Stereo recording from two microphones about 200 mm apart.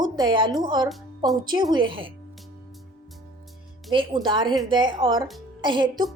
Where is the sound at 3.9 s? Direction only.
25° right (ahead or behind).